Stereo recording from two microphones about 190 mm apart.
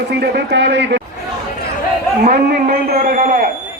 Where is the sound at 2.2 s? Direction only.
50° right (ahead or behind).